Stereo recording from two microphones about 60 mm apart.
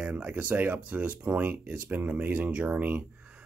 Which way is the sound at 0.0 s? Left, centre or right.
Right.